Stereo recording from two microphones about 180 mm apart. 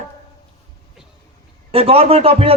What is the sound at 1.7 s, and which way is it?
Speech, 35° right (ahead or behind).